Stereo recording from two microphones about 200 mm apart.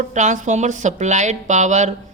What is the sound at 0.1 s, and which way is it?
Speech, 35° right (ahead or behind).